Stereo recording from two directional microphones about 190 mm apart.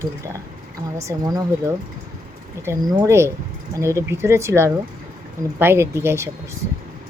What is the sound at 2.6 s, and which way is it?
Speech, 20° right (ahead or behind).